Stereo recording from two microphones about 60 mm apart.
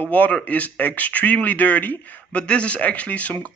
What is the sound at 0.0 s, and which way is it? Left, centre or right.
Speech, left.